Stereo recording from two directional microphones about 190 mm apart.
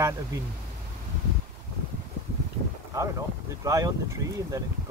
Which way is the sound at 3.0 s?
15° right (ahead or behind).